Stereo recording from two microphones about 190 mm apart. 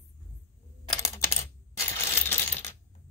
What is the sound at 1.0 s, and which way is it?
Coin, 15° left (ahead or behind).